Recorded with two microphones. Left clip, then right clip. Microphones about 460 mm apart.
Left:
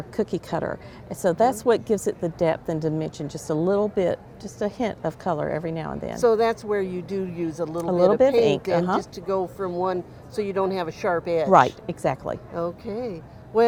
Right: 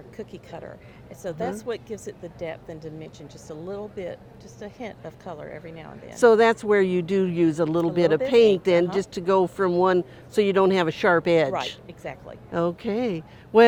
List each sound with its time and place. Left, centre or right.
0.2 s a woman's voice: left
6.1 s speech: right
11.5 s a woman's voice: left
12.5 s speech: right